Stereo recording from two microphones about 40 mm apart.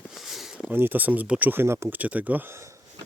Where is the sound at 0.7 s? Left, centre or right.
Right.